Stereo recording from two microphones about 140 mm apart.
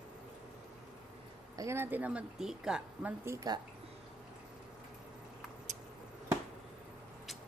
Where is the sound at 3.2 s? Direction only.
30° right (ahead or behind).